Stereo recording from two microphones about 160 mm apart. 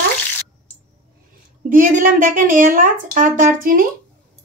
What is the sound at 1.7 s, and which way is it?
Speech, 55° right (ahead or behind).